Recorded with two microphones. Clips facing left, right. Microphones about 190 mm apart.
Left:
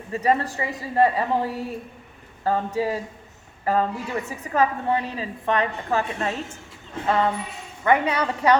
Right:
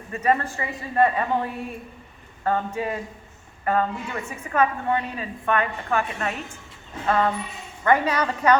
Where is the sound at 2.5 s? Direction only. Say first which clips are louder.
Left 3 dB; 30° left (ahead or behind).